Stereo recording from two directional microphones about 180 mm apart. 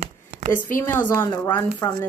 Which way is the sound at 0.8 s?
10° left (ahead or behind).